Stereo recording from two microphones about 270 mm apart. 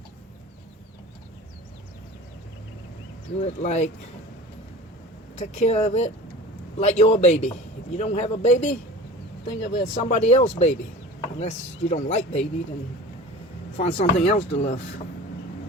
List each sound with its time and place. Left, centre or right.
3.3 s speech: left
5.4 s speech: left
13.7 s speech: left